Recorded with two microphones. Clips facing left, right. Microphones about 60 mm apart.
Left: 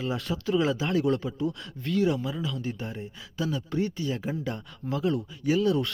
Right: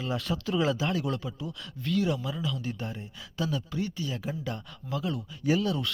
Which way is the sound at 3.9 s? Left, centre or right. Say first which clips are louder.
Left 4 dB; left.